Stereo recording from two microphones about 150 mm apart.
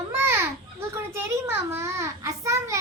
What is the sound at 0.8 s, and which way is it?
A child's voice, 15° right (ahead or behind).